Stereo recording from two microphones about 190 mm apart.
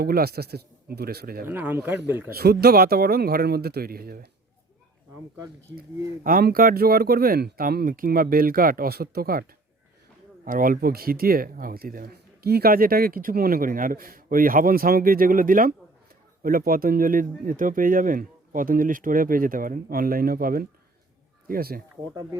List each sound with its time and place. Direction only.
0.0 s speech: 55° right (ahead or behind)
1.5 s speech: 10° right (ahead or behind)
2.3 s speech: 55° right (ahead or behind)
6.2 s speech: 50° right (ahead or behind)
10.4 s speech: 45° right (ahead or behind)
22.1 s speech: 20° right (ahead or behind)